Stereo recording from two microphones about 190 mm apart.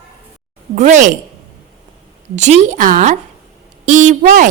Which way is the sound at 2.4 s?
40° right (ahead or behind).